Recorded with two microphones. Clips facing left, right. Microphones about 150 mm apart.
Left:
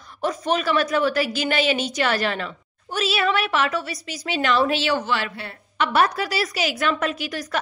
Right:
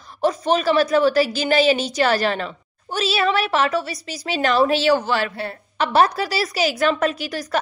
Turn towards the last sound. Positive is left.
turn(degrees=-35)  # may be behind; listen again after turning